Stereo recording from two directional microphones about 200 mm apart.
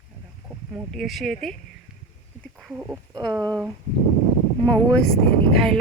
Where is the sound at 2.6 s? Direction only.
5° right (ahead or behind).